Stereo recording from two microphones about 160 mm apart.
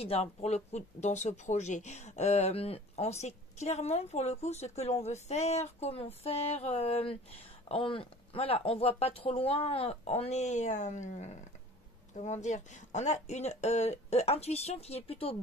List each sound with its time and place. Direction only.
0.0 s speech: 40° left (ahead or behind)